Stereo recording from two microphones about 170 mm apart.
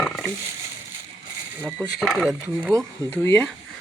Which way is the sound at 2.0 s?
Centre (ahead or behind).